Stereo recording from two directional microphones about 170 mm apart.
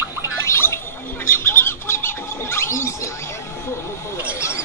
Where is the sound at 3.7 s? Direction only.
15° left (ahead or behind).